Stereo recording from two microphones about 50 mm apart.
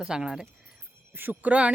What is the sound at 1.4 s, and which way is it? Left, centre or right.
Speech, right.